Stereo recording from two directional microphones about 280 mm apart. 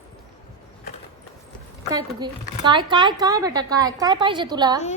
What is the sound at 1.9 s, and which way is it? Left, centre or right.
Speech, centre.